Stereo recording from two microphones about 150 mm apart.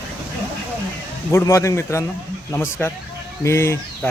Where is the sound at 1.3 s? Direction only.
20° left (ahead or behind).